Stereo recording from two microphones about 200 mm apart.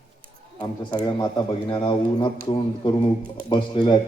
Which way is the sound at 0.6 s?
20° left (ahead or behind).